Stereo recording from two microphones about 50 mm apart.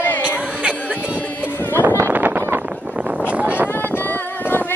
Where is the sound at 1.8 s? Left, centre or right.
Right.